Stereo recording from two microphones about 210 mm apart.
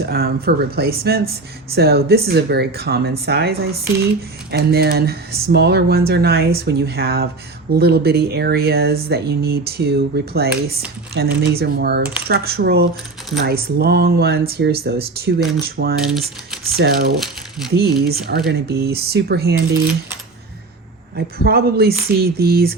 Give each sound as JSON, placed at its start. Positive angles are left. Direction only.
{"t": 0.0, "sound": "speech", "side_deg": -45}
{"t": 21.2, "sound": "speech", "side_deg": -45}